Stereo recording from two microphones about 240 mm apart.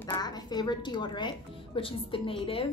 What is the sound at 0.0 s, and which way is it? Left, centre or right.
A woman's voice, centre.